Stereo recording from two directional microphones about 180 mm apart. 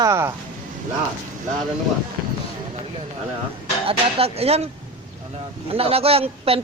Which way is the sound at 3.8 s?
35° right (ahead or behind).